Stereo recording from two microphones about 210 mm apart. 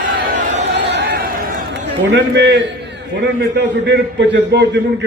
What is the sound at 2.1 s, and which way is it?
A man's voice, 55° right (ahead or behind).